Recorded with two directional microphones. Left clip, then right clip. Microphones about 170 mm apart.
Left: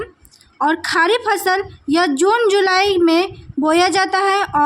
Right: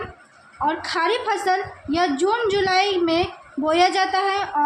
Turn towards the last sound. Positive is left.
turn(degrees=50)  # may be behind; listen again after turning